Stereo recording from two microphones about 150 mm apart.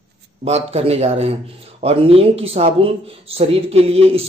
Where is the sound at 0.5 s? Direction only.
45° right (ahead or behind).